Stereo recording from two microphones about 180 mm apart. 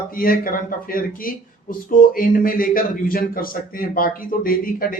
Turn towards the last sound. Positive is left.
turn(degrees=50)  # may be behind; listen again after turning